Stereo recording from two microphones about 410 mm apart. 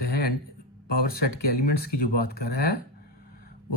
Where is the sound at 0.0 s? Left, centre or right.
Left.